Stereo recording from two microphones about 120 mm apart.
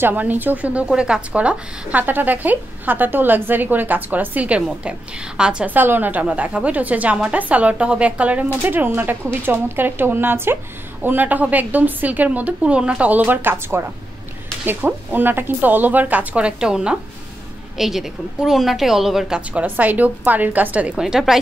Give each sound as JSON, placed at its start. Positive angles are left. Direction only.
{"t": 0.0, "sound": "a woman's voice", "side_deg": -15}